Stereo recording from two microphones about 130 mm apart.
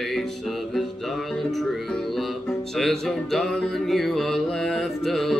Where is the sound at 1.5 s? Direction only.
Centre (ahead or behind).